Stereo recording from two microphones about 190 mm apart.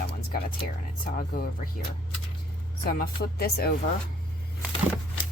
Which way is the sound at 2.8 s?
55° left (ahead or behind).